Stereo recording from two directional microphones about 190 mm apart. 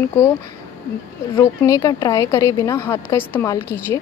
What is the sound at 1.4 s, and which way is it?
Speech, 20° left (ahead or behind).